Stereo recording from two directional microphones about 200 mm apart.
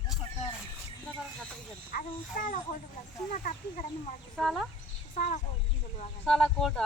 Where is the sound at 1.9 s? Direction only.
40° left (ahead or behind).